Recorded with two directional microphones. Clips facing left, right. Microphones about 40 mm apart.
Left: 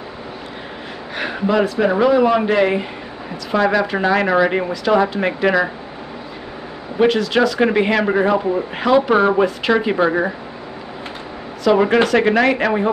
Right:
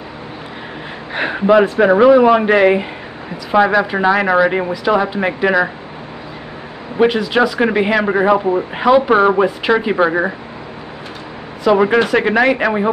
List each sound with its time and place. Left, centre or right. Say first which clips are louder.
1.1 s speech: right 6 dB; right
7.0 s speech: right 2 dB; centre
11.6 s speech: right 2 dB; centre